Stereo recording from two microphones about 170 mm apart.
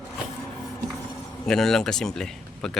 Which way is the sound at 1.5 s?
Centre (ahead or behind).